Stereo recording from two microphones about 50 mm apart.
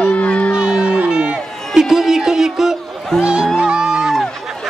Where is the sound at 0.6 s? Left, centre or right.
Centre.